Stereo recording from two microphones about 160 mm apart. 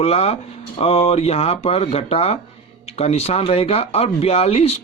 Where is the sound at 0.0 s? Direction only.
40° left (ahead or behind).